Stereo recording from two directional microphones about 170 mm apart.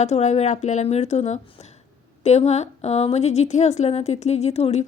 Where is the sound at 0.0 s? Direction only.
40° left (ahead or behind).